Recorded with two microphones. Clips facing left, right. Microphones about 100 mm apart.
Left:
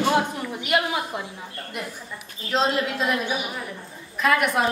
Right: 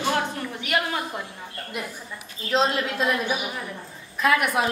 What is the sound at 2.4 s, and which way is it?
Speech, centre (ahead or behind).